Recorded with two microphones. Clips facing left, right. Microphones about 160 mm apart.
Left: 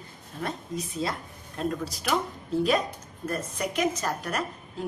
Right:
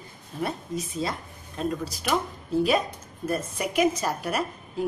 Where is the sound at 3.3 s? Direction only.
10° right (ahead or behind).